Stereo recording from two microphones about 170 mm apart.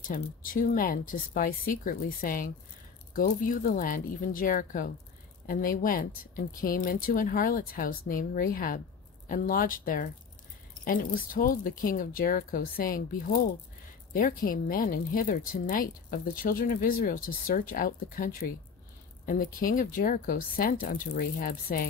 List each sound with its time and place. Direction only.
0.1 s speech: 55° left (ahead or behind)
14.1 s speech: 55° left (ahead or behind)